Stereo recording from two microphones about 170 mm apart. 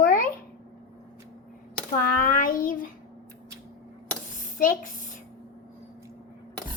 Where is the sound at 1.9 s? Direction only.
55° left (ahead or behind).